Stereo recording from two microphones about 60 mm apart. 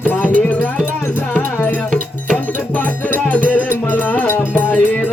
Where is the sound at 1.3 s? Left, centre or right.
Left.